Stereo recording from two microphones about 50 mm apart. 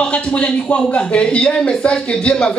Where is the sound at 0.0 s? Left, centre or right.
Left.